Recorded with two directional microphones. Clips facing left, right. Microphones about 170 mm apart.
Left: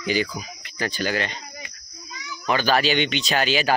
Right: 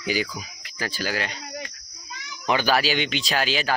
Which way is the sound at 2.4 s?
10° right (ahead or behind).